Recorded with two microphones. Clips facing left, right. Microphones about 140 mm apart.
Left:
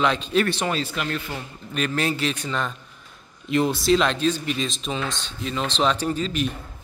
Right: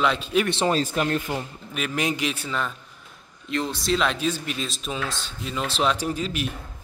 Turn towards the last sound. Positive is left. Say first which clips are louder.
# left 3 dB
turn(degrees=-10)  # may be behind; listen again after turning